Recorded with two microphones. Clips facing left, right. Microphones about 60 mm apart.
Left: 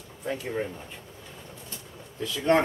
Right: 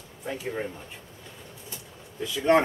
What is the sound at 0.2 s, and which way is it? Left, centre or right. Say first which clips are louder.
Speech: left 2 dB; centre.